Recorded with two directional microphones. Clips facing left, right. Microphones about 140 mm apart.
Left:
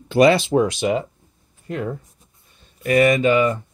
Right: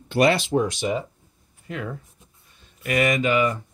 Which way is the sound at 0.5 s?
85° left.